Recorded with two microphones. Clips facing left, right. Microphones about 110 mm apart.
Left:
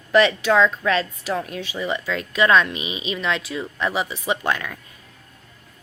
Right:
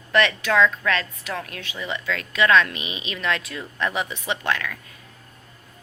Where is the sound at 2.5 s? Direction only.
20° left (ahead or behind).